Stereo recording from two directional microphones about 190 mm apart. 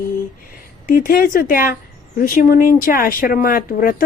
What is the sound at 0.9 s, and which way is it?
Speech, 50° left (ahead or behind).